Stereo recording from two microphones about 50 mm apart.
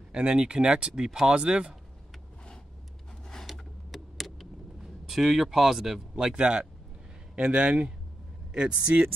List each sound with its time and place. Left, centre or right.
0.2 s speech: centre
3.5 s a sound: centre; by 6.7 s right
7.3 s speech: right